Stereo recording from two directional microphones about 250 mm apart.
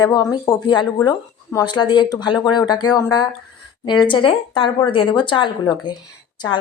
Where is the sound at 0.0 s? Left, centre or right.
Centre.